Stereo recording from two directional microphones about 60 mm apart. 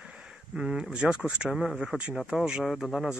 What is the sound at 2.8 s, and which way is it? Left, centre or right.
Speech, centre.